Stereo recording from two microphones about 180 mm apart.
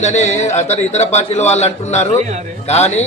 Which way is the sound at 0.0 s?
40° left (ahead or behind).